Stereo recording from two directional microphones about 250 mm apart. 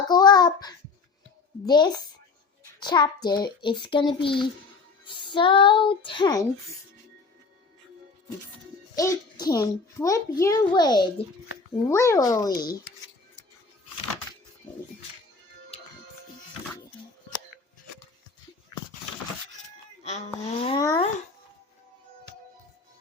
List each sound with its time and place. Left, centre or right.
0.1 s a child's voice: centre
9.0 s a child's voice: centre
20.1 s speech: left